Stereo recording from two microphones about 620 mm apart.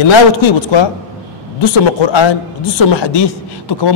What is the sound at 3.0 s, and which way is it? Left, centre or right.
Speech, left.